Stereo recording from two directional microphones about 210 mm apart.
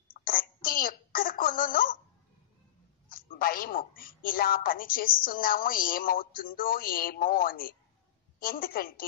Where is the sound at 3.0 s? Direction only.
40° left (ahead or behind).